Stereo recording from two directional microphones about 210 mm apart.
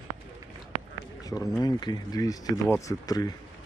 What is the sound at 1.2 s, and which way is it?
Speech, 15° left (ahead or behind).